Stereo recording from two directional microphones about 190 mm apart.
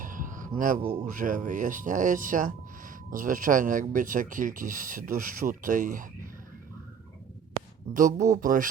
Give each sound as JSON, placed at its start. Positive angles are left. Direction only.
{"t": 0.0, "sound": "a sound", "side_deg": -45}
{"t": 1.1, "sound": "speech", "side_deg": -45}
{"t": 7.9, "sound": "speech", "side_deg": -45}